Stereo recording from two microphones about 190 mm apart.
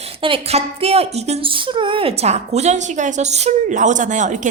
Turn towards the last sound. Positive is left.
turn(degrees=-40)  # may be behind; listen again after turning